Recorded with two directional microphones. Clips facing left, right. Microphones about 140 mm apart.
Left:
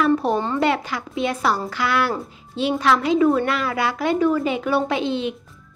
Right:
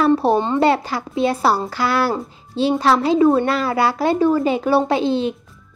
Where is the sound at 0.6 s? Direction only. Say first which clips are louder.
Right 4 dB; 35° right (ahead or behind).